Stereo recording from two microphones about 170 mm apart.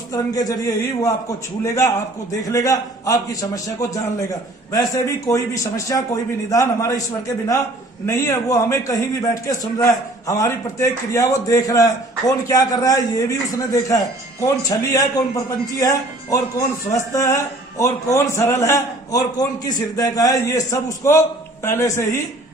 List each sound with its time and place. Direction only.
0.1 s a man's voice: 20° left (ahead or behind)